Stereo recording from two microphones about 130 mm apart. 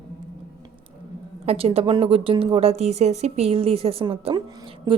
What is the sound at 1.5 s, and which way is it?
Speech, 50° right (ahead or behind).